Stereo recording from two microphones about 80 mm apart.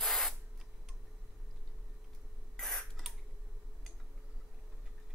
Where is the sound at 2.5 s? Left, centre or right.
Centre.